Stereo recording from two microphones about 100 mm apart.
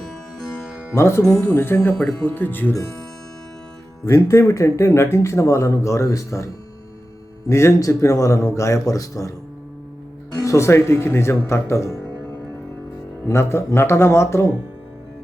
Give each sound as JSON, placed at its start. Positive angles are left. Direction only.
{"t": 0.9, "sound": "speech", "side_deg": 25}
{"t": 2.0, "sound": "speech", "side_deg": 5}
{"t": 2.2, "sound": "speech", "side_deg": 20}
{"t": 4.1, "sound": "a man's voice", "side_deg": 30}
{"t": 10.3, "sound": "speech", "side_deg": 30}
{"t": 13.2, "sound": "speech", "side_deg": 25}